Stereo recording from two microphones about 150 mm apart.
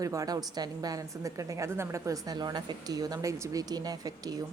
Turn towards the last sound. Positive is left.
turn(degrees=-25)  # may be behind; listen again after turning